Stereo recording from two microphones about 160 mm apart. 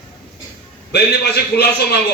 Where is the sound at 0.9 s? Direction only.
85° left.